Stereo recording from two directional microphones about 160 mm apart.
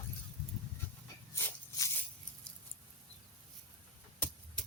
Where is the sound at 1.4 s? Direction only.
15° left (ahead or behind).